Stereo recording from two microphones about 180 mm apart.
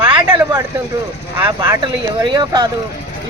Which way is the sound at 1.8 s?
25° right (ahead or behind).